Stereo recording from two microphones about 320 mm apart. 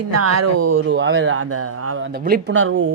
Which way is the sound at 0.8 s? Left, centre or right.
Right.